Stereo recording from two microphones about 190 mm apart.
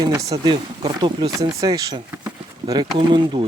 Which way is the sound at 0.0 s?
15° right (ahead or behind).